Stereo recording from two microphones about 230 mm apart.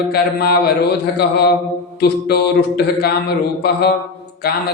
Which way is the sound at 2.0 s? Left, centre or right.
Left.